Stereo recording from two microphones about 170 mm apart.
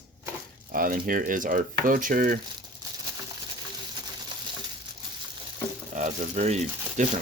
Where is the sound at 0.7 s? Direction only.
55° right (ahead or behind).